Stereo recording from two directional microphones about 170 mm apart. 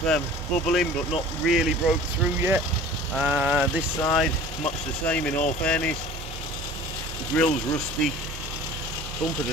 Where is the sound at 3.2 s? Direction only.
5° right (ahead or behind).